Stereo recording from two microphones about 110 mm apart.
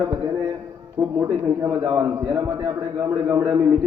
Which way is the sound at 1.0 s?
25° right (ahead or behind).